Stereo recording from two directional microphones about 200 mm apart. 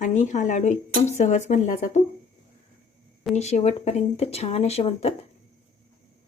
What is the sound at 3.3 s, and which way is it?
Speech, 35° left (ahead or behind).